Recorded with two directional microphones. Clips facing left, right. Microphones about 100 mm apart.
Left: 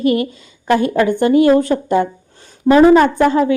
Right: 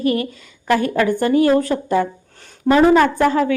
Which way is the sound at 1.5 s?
25° left (ahead or behind).